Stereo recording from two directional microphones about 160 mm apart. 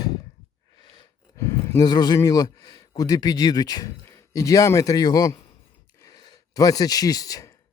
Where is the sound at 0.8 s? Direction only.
25° left (ahead or behind).